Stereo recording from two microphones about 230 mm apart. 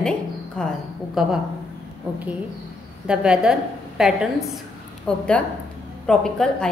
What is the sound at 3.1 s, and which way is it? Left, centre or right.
A woman's voice, centre.